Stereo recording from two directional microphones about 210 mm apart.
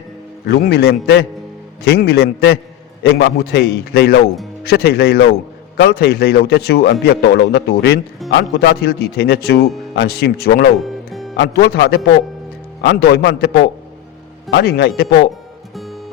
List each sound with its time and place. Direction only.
0.4 s a man's voice: 50° left (ahead or behind)
10.8 s music: centre (ahead or behind)
11.3 s a man's voice: 50° left (ahead or behind)
14.5 s a man's voice: 50° left (ahead or behind)
15.7 s music: centre (ahead or behind)